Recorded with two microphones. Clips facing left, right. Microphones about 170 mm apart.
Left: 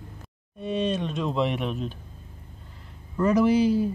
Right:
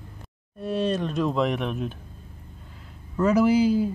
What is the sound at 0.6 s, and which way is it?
Speech, centre (ahead or behind).